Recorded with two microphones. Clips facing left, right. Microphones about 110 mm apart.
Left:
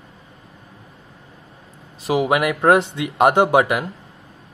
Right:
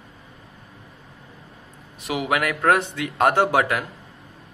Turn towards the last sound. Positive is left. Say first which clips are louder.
# left 4 dB
turn(degrees=20)  # may be behind; listen again after turning